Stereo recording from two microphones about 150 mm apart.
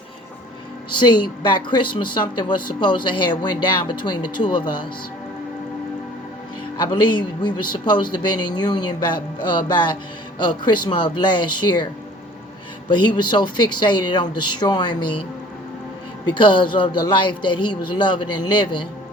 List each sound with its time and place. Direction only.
0.9 s a woman's voice: 30° left (ahead or behind)
6.7 s speech: 30° left (ahead or behind)
12.9 s speech: 30° left (ahead or behind)
16.2 s a woman's voice: 30° left (ahead or behind)